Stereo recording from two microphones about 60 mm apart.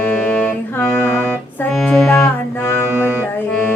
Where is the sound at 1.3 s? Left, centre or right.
Centre.